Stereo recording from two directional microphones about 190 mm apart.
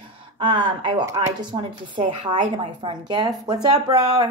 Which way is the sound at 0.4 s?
25° right (ahead or behind).